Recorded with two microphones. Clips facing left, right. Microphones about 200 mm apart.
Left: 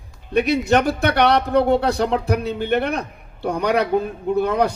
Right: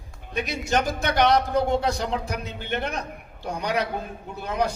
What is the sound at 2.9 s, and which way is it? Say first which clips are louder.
A man's voice: left 5 dB; 60° left (ahead or behind).